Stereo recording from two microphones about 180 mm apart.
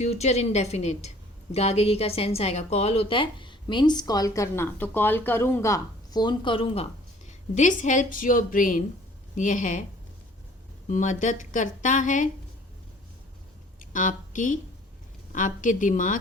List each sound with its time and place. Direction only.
0.0 s a woman's voice: 35° left (ahead or behind)
7.3 s speech: 40° left (ahead or behind)
10.8 s speech: 45° left (ahead or behind)
13.9 s a woman's voice: 45° left (ahead or behind)